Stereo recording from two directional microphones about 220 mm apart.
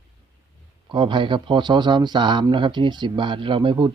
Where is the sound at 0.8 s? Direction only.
20° right (ahead or behind).